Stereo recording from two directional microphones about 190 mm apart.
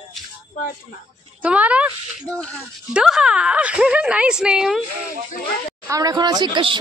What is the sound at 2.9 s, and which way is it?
A child's voice, 5° right (ahead or behind).